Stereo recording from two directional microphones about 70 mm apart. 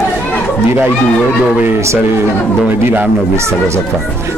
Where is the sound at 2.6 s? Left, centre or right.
Right.